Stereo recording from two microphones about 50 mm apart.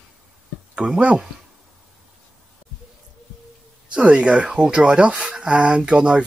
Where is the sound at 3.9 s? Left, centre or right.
Centre.